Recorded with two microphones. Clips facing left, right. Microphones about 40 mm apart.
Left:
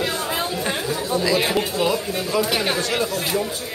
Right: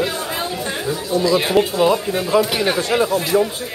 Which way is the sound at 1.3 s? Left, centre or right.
Centre.